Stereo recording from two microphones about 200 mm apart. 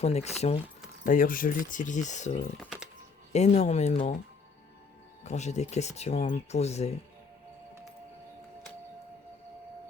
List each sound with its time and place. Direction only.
0.0 s speech: 35° left (ahead or behind)
2.6 s music: 5° right (ahead or behind)
3.3 s speech: 35° left (ahead or behind)
5.2 s speech: 35° left (ahead or behind)